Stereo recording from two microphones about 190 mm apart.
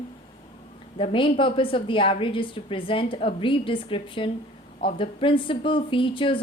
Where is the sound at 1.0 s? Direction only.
30° left (ahead or behind).